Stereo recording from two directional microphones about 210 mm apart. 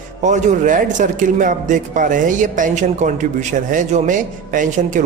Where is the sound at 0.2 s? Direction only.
35° right (ahead or behind).